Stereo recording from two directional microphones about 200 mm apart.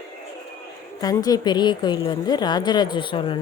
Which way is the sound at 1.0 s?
20° left (ahead or behind).